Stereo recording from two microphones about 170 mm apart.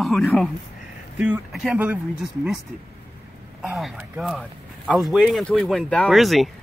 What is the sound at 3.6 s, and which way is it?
Speech, centre (ahead or behind).